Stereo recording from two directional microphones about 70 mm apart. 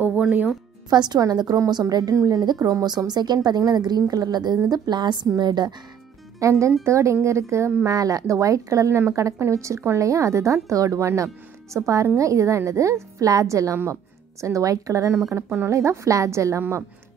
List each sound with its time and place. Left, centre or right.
0.8 s a woman's voice: right
2.1 s a woman's voice: right
2.8 s speech: right
3.4 s a woman's voice: right
6.4 s speech: right
7.8 s speech: right